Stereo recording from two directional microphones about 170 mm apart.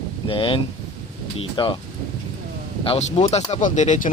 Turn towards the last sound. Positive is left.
turn(degrees=45)  # may be behind; listen again after turning